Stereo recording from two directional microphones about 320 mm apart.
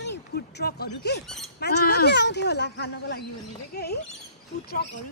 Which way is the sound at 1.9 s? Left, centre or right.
Left.